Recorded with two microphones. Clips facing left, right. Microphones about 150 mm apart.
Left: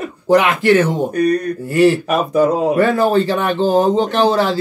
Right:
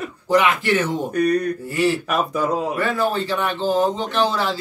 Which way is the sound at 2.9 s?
60° left (ahead or behind).